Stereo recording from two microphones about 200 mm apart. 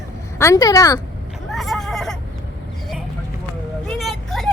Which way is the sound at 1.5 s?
Centre (ahead or behind).